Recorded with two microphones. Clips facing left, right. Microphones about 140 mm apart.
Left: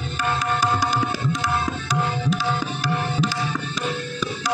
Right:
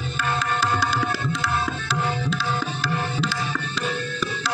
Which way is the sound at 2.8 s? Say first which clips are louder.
Left 2 dB; 15° left (ahead or behind).